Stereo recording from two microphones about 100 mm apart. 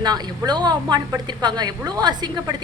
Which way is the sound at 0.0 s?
45° right (ahead or behind).